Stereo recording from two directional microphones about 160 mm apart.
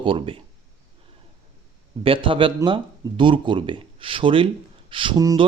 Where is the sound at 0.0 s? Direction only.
35° right (ahead or behind).